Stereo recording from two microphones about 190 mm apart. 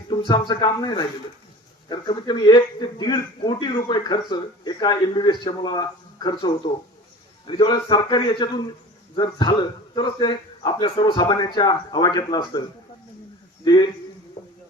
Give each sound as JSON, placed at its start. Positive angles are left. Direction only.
{"t": 0.3, "sound": "a man's voice", "side_deg": 20}
{"t": 13.7, "sound": "a man's voice", "side_deg": 20}